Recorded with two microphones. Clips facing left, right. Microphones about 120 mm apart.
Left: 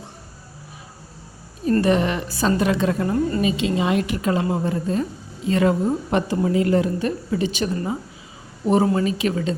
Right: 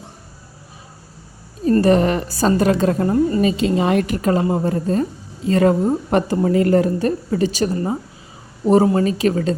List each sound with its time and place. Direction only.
1.8 s a woman's voice: 40° right (ahead or behind)
3.1 s a woman's voice: 20° right (ahead or behind)
3.4 s a woman's voice: 45° right (ahead or behind)